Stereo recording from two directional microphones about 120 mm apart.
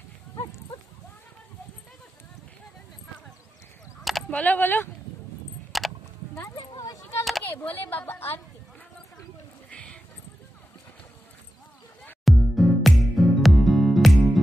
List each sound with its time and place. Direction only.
4.3 s a woman's voice: 15° left (ahead or behind)
5.7 s a sound: centre (ahead or behind)
6.5 s a sound: 30° left (ahead or behind)
7.4 s a woman's voice: 15° left (ahead or behind)
9.7 s clip-clop: 10° left (ahead or behind)
12.3 s music: centre (ahead or behind)